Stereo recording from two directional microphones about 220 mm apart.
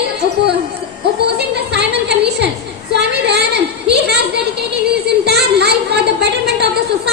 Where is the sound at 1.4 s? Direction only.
50° right (ahead or behind).